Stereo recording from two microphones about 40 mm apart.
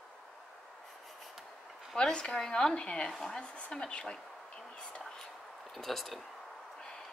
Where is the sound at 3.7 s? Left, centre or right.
Centre.